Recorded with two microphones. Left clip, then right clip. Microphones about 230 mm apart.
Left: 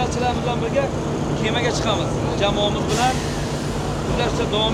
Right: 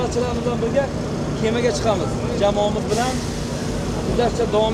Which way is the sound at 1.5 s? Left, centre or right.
Right.